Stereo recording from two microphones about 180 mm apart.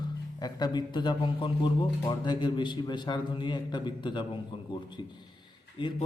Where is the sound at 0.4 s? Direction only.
25° left (ahead or behind).